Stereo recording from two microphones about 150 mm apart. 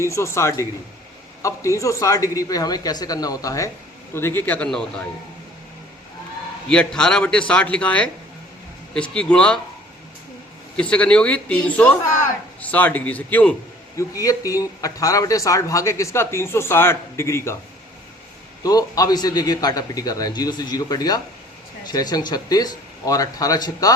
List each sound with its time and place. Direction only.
0.1 s a man's voice: 20° left (ahead or behind)
6.7 s a man's voice: 5° left (ahead or behind)
9.1 s a man's voice: 5° left (ahead or behind)
10.8 s a man's voice: 10° left (ahead or behind)
13.9 s speech: 20° left (ahead or behind)
18.6 s speech: 25° left (ahead or behind)